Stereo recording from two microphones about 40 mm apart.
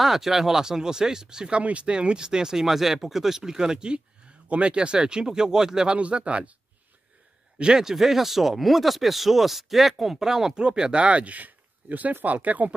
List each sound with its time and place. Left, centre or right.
0.0 s speech: centre
1.6 s speech: right; by 5.9 s centre
5.9 s speech: right
7.5 s a man's voice: right
7.8 s speech: centre
10.1 s speech: centre
10.6 s speech: right